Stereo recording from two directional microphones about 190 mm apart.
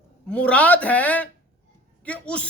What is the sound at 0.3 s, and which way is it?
A man's voice, 5° left (ahead or behind).